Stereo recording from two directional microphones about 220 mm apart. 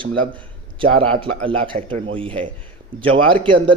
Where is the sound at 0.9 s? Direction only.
85° right.